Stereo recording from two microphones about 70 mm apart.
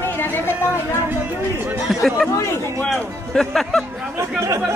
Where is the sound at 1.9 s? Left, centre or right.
Centre.